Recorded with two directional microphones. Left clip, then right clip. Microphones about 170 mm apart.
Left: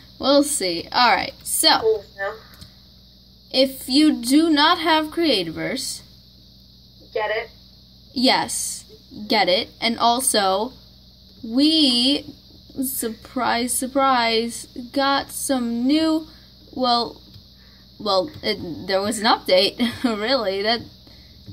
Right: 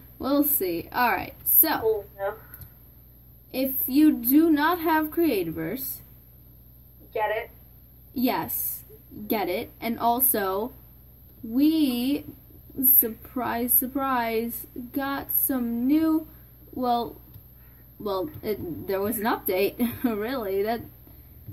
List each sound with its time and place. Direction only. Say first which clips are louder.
0.2 s a woman's voice: left 7 dB; 30° left (ahead or behind)
3.5 s a woman's voice: left 7 dB; 30° left (ahead or behind)
7.1 s speech: left 3 dB; 10° right (ahead or behind)
8.1 s a woman's voice: left 8 dB; 30° left (ahead or behind)
13.3 s a woman's voice: left 8 dB; 25° left (ahead or behind)